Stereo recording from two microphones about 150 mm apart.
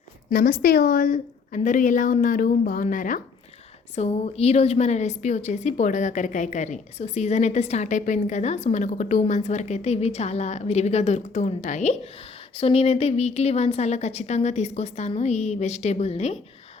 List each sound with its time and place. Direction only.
0.3 s a woman's voice: 90° left; by 3.2 s 65° left (ahead or behind)
3.9 s a woman's voice: 45° left (ahead or behind)
12.5 s a woman's voice: 40° left (ahead or behind)